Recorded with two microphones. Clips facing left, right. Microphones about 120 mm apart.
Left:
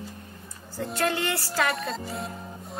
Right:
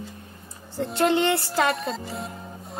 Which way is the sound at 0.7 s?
25° right (ahead or behind).